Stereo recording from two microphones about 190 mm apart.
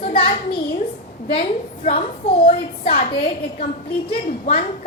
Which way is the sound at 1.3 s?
30° left (ahead or behind).